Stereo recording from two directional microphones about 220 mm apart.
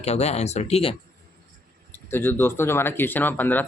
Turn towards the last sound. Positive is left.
turn(degrees=10)  # may be behind; listen again after turning